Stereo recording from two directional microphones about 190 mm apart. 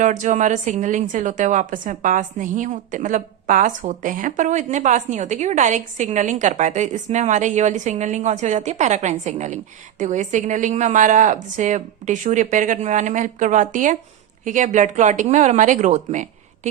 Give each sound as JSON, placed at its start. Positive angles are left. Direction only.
{"t": 0.0, "sound": "a woman's voice", "side_deg": -40}